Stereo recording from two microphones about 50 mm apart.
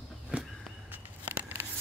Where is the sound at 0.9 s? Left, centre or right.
Right.